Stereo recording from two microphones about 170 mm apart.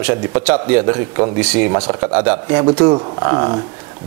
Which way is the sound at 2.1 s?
10° right (ahead or behind).